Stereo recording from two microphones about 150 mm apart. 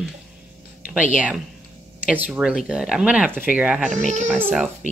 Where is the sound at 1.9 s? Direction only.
10° right (ahead or behind).